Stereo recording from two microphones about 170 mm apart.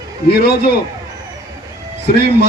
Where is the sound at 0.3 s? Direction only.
70° left (ahead or behind).